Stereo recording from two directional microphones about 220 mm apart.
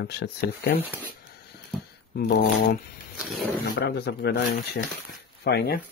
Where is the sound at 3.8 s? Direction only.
45° left (ahead or behind).